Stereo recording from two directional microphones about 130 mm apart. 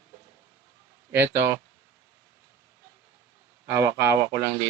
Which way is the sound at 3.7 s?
20° right (ahead or behind).